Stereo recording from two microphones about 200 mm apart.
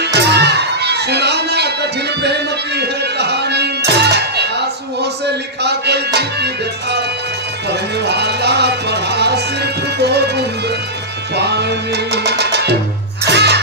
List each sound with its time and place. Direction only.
0.0 s music: 55° right (ahead or behind)
7.7 s music: 55° right (ahead or behind)